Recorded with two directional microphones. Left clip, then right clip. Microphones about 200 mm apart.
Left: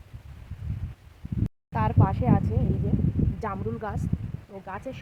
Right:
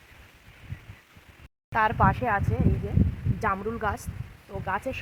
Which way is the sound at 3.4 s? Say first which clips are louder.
Right 8 dB; 20° right (ahead or behind).